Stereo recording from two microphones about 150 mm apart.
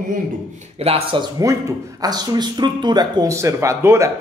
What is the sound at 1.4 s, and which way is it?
Speech, 25° right (ahead or behind).